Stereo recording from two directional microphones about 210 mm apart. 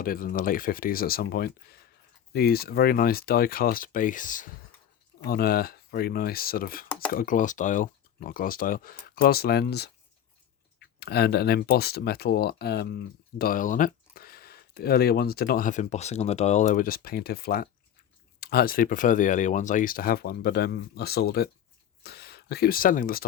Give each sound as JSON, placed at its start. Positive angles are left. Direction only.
{"t": 0.0, "sound": "speech", "side_deg": 45}